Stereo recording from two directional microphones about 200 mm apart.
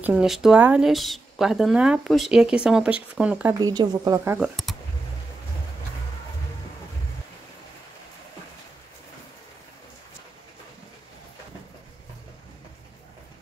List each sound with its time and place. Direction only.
0.0 s speech: 5° right (ahead or behind)
3.5 s speech: 20° right (ahead or behind)